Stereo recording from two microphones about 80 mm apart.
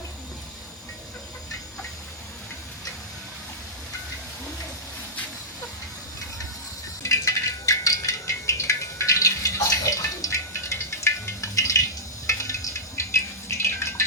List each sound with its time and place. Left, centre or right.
7.0 s a sound: left
13.0 s rattle: left
13.6 s drip: left